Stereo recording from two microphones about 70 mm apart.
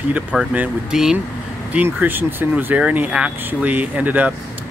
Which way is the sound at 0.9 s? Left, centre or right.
Centre.